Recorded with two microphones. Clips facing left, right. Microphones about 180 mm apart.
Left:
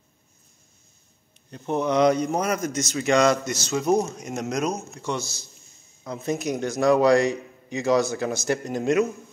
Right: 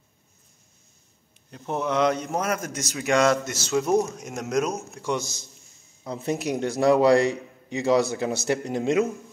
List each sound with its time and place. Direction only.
1.5 s a man's voice: 5° right (ahead or behind)
6.0 s a man's voice: 30° right (ahead or behind)